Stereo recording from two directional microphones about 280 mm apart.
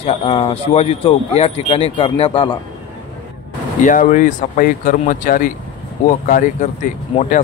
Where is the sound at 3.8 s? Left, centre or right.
Left.